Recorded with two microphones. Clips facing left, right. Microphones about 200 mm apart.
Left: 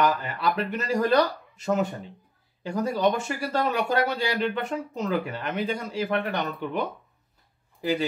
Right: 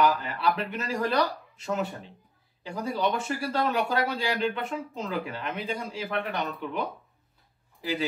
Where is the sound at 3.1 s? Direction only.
Centre (ahead or behind).